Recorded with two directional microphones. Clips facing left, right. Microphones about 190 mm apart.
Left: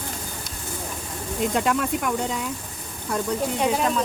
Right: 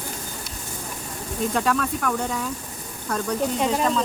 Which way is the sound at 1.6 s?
20° left (ahead or behind).